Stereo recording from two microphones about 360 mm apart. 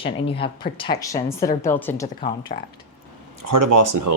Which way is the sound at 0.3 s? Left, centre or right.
Centre.